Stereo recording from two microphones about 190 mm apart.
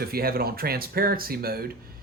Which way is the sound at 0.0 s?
50° right (ahead or behind).